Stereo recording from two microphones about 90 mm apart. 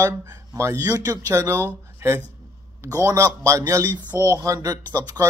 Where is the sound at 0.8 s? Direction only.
45° right (ahead or behind).